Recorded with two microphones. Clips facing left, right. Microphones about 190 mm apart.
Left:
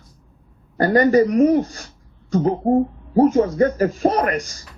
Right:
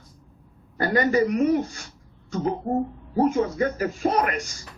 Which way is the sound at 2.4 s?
50° left (ahead or behind).